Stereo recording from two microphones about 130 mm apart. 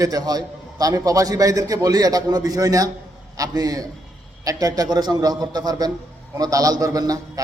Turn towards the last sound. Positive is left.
turn(degrees=-25)  # may be behind; listen again after turning